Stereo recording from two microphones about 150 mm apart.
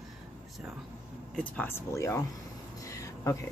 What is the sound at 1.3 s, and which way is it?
Speech, 10° left (ahead or behind).